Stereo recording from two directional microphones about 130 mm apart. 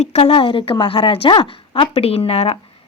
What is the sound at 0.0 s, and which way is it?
A woman's voice, 50° left (ahead or behind).